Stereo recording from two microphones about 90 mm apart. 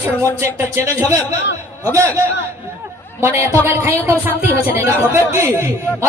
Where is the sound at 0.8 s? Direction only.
35° right (ahead or behind).